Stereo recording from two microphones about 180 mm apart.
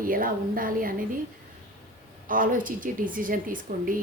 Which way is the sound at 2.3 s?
50° right (ahead or behind).